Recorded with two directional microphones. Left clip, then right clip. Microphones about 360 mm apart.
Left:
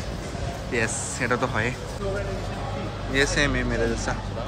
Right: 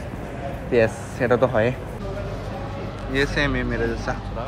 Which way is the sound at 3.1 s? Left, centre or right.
Centre.